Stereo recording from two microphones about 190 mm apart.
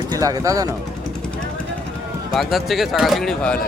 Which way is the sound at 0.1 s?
20° right (ahead or behind).